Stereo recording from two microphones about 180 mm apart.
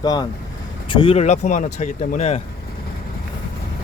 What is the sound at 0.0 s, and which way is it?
Speech, 20° left (ahead or behind).